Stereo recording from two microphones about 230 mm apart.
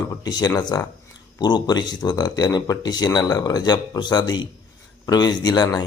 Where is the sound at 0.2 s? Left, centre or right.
Centre.